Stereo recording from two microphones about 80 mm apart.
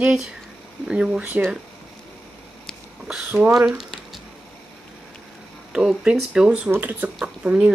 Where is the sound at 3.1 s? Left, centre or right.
Centre.